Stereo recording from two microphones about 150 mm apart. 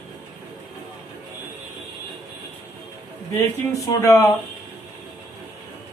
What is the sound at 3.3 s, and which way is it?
Speech, 20° left (ahead or behind).